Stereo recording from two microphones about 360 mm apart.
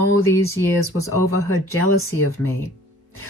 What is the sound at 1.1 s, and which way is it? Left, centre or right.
Speech, left.